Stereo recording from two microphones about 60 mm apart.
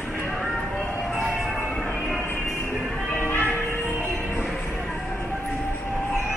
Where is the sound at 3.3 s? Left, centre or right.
Left.